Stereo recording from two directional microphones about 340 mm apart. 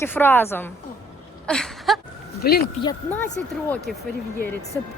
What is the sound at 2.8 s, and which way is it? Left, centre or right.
Speech, centre.